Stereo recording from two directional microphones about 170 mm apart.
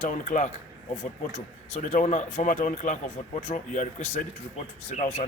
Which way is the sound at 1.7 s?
45° left (ahead or behind).